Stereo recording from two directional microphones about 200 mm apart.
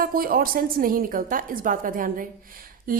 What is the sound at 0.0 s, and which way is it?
A woman's voice, 45° right (ahead or behind).